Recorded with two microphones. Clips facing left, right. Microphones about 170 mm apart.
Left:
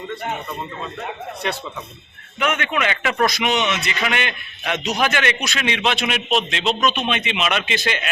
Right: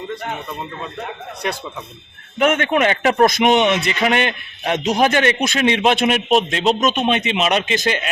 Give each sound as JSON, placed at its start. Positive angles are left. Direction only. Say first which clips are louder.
{"t": 2.4, "sound": "a man's voice", "louder": "right 6 dB", "side_deg": -50}
{"t": 4.0, "sound": "a man's voice", "louder": "right 6 dB", "side_deg": -40}
{"t": 5.4, "sound": "a man's voice", "louder": "right 6 dB", "side_deg": -50}